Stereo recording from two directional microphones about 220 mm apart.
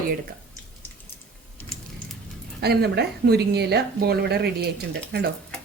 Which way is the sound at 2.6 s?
45° right (ahead or behind).